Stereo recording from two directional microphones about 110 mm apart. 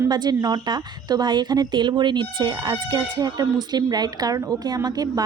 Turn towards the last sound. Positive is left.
turn(degrees=-35)  # may be behind; listen again after turning